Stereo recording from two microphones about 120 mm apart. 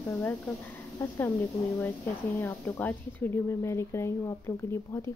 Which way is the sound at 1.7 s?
15° left (ahead or behind).